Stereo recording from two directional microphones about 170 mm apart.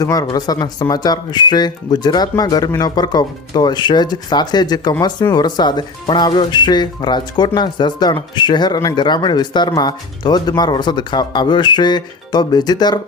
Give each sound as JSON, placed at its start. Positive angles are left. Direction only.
{"t": 0.0, "sound": "speech", "side_deg": 20}